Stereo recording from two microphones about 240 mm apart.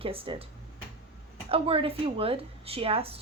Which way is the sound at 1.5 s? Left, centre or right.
Right.